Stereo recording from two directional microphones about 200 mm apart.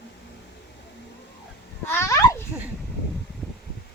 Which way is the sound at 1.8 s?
10° left (ahead or behind).